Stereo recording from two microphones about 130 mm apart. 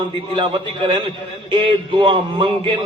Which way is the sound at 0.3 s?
40° right (ahead or behind).